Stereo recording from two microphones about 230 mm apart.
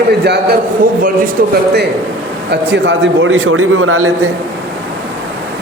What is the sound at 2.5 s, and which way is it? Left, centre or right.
A man's voice, right.